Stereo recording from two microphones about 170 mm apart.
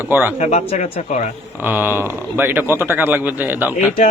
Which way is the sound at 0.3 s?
40° left (ahead or behind).